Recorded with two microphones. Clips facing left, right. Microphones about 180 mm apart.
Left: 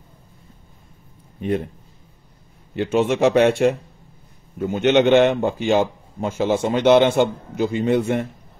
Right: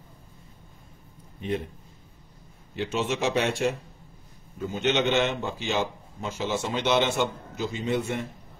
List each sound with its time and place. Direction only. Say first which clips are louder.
2.7 s a man's voice: left 9 dB; 55° left (ahead or behind)